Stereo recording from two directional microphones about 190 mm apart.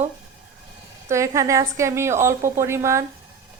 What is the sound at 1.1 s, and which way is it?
A woman's voice, 15° right (ahead or behind).